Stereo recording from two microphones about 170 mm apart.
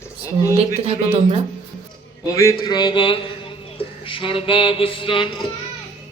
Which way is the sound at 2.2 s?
20° left (ahead or behind).